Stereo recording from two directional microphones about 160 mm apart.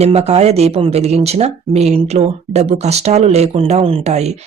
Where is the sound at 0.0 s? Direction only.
40° right (ahead or behind).